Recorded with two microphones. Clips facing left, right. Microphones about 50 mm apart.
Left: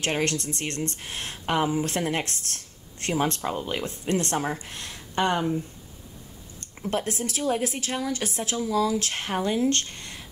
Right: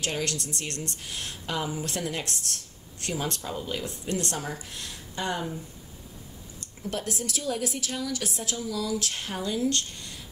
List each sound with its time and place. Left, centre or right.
0.0 s speech: left
6.6 s speech: left